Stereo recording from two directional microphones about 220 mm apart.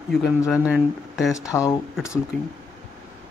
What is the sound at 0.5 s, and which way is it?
Speech, centre (ahead or behind).